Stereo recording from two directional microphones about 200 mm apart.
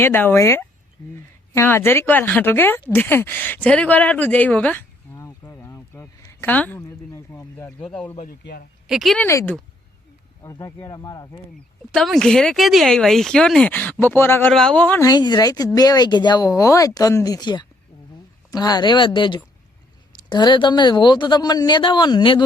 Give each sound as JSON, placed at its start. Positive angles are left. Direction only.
{"t": 0.0, "sound": "speech", "side_deg": 10}
{"t": 8.3, "sound": "a man's voice", "side_deg": 50}
{"t": 8.9, "sound": "speech", "side_deg": 0}
{"t": 9.2, "sound": "speech", "side_deg": 15}
{"t": 11.9, "sound": "speech", "side_deg": 0}